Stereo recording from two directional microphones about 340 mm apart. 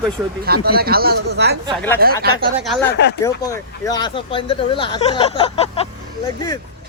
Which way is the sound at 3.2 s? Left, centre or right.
Centre.